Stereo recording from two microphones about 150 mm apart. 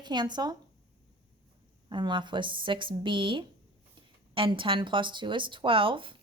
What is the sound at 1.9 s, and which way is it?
Speech, 30° right (ahead or behind).